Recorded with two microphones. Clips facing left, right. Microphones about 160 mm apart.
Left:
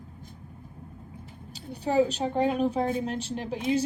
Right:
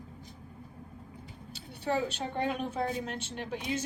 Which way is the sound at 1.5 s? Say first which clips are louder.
Left 7 dB; 40° left (ahead or behind).